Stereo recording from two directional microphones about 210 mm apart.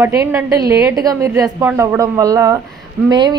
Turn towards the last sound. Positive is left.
turn(degrees=-20)  # may be behind; listen again after turning